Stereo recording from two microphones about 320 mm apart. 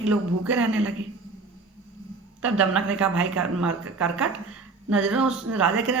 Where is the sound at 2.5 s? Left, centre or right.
Centre.